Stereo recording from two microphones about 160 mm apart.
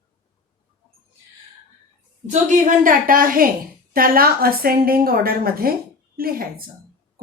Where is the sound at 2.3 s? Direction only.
50° right (ahead or behind).